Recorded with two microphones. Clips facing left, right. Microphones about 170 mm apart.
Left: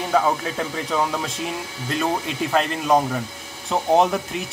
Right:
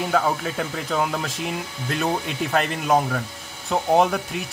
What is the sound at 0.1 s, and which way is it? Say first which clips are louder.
Speech: left 4 dB; centre (ahead or behind).